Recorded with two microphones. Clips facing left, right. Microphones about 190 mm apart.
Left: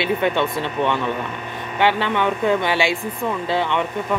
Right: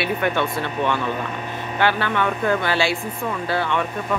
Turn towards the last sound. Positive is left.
turn(degrees=20)  # may be behind; listen again after turning